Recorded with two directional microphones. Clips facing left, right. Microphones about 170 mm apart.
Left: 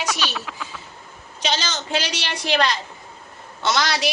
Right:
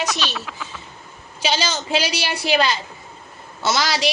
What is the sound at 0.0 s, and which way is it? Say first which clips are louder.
Speech: right 1 dB; 10° left (ahead or behind).